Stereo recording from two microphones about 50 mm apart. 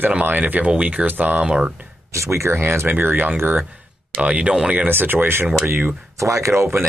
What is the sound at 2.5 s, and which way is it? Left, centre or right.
Speech, right.